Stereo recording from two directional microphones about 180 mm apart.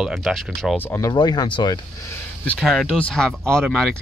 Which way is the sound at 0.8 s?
15° left (ahead or behind).